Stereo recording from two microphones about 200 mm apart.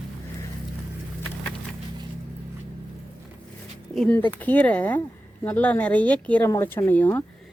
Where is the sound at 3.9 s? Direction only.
5° left (ahead or behind).